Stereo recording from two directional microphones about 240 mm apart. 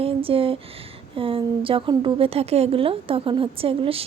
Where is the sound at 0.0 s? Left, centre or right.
Right.